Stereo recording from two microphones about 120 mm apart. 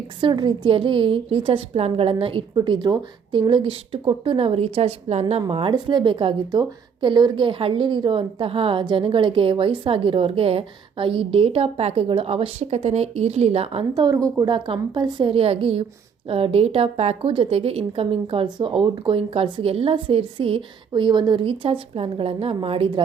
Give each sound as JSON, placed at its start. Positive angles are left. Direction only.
{"t": 0.2, "sound": "a woman's voice", "side_deg": -40}
{"t": 5.5, "sound": "a woman's voice", "side_deg": -50}
{"t": 13.9, "sound": "a woman's voice", "side_deg": -35}
{"t": 14.5, "sound": "a woman's voice", "side_deg": -40}